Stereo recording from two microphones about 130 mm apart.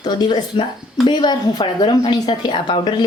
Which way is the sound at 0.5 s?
40° left (ahead or behind).